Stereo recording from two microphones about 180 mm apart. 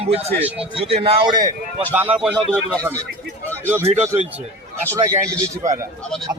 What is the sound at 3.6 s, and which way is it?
Speech, 10° right (ahead or behind).